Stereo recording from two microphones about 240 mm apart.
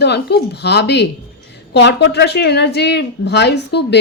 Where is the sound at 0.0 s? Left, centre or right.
Left.